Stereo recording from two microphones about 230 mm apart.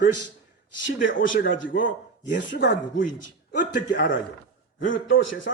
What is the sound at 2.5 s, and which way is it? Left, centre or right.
Speech, left.